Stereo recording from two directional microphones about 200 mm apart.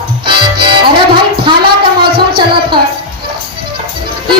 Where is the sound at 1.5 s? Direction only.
25° right (ahead or behind).